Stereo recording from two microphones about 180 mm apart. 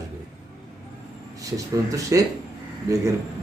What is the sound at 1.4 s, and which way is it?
Speech, 20° right (ahead or behind).